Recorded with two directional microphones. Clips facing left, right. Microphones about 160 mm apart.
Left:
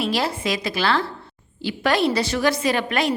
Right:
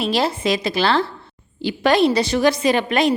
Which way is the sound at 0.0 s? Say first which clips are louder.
Right 3 dB; 25° right (ahead or behind).